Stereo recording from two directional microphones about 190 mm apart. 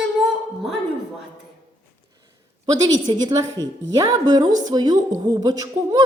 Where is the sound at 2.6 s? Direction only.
20° right (ahead or behind).